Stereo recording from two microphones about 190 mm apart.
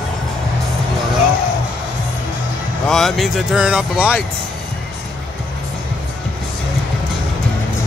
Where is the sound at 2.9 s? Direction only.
Centre (ahead or behind).